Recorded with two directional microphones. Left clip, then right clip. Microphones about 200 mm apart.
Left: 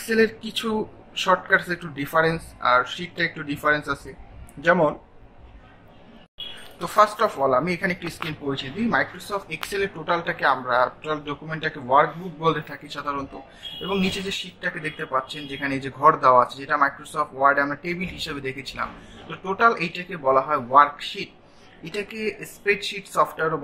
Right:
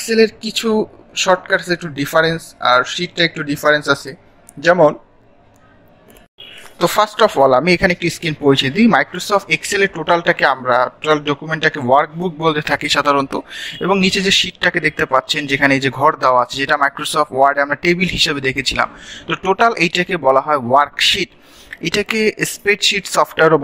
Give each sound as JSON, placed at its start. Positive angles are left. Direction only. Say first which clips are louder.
{"t": 0.0, "sound": "speech", "louder": "right 7 dB", "side_deg": -25}
{"t": 6.8, "sound": "speech", "louder": "right 6 dB", "side_deg": -35}